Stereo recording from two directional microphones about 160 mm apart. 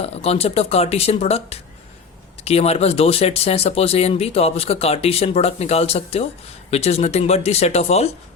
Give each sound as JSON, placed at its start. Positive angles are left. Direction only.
{"t": 0.0, "sound": "speech", "side_deg": 40}